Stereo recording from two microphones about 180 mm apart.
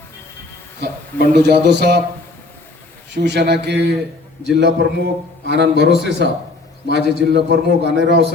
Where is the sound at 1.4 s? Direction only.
65° right (ahead or behind).